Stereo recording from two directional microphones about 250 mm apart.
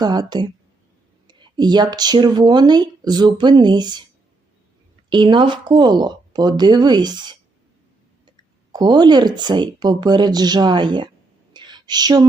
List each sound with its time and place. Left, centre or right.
0.0 s speech: centre
5.0 s speech: centre
8.7 s speech: centre
11.5 s a sound: centre